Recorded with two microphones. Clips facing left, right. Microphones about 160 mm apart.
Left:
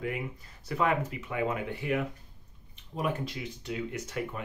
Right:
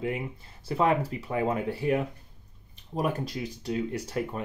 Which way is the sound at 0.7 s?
30° right (ahead or behind).